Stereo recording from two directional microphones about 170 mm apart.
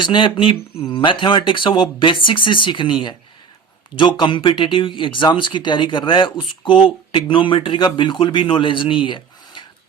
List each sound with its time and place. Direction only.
0.0 s speech: 25° left (ahead or behind)
3.9 s speech: 25° left (ahead or behind)